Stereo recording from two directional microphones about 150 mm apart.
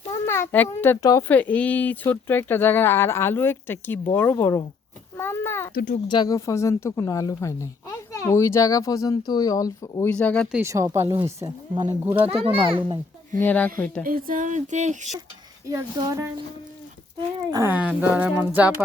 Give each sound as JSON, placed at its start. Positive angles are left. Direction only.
{"t": 0.3, "sound": "speech", "side_deg": 15}
{"t": 5.1, "sound": "a sound", "side_deg": 15}
{"t": 5.7, "sound": "speech", "side_deg": 60}
{"t": 6.1, "sound": "speech", "side_deg": 25}
{"t": 10.1, "sound": "speech", "side_deg": 10}
{"t": 10.6, "sound": "a woman's voice", "side_deg": -20}
{"t": 12.5, "sound": "a child's voice", "side_deg": -35}
{"t": 13.4, "sound": "speech", "side_deg": 10}
{"t": 14.0, "sound": "speech", "side_deg": -70}
{"t": 15.7, "sound": "a woman's voice", "side_deg": -25}
{"t": 17.5, "sound": "a woman's voice", "side_deg": -20}
{"t": 17.7, "sound": "speech", "side_deg": -10}